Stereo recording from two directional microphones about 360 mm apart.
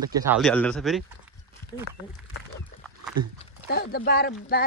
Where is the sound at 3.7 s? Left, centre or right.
Left.